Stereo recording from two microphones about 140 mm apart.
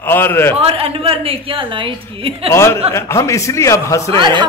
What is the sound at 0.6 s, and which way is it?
A woman's voice, 45° right (ahead or behind).